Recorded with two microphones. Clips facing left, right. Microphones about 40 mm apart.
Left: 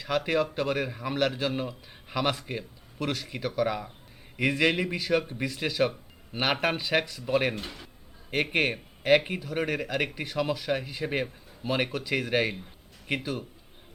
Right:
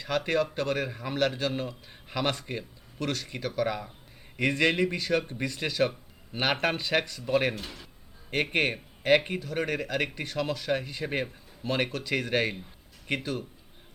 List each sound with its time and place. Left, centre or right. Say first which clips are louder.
0.0 s speech: left 1 dB; centre
7.5 s speech: left 2 dB; centre
8.3 s speech: left 1 dB; centre